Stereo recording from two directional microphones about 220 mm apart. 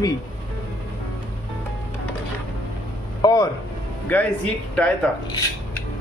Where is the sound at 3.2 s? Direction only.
15° left (ahead or behind).